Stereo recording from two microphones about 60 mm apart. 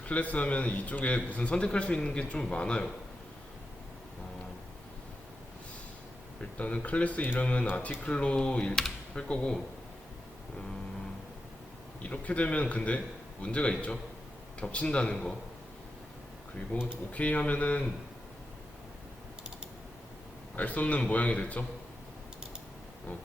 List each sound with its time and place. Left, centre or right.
0.0 s a man's voice: left
6.4 s a man's voice: left
12.0 s a man's voice: left
16.7 s a man's voice: left
20.6 s a man's voice: left